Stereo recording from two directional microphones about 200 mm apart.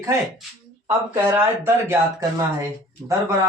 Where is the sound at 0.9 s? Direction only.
15° right (ahead or behind).